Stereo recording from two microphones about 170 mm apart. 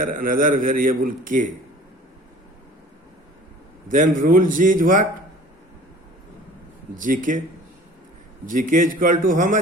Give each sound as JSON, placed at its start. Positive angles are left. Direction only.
{"t": 0.0, "sound": "a man's voice", "side_deg": -55}
{"t": 3.8, "sound": "a man's voice", "side_deg": -50}
{"t": 6.9, "sound": "a man's voice", "side_deg": -50}
{"t": 8.4, "sound": "a man's voice", "side_deg": -50}